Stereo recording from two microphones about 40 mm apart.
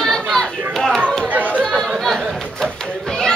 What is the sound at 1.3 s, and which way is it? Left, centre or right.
Chatter, right.